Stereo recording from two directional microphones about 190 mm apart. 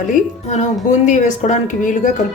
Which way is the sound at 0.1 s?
40° left (ahead or behind).